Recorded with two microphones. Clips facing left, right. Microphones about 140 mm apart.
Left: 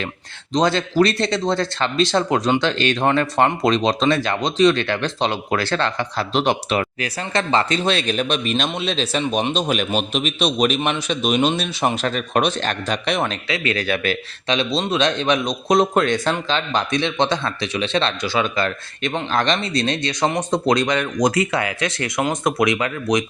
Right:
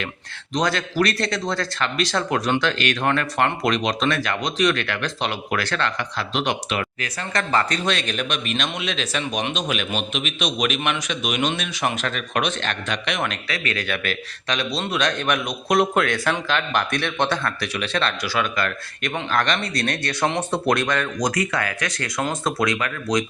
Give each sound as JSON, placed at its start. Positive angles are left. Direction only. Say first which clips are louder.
{"t": 0.5, "sound": "a man's voice", "louder": "left 5 dB", "side_deg": 25}